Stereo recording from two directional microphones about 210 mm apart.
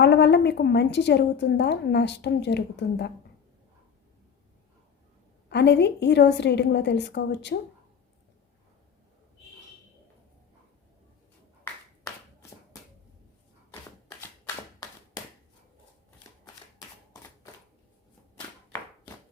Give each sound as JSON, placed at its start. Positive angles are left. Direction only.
{"t": 0.0, "sound": "a woman's voice", "side_deg": 55}
{"t": 5.5, "sound": "a woman's voice", "side_deg": 55}
{"t": 14.2, "sound": "a sound", "side_deg": 15}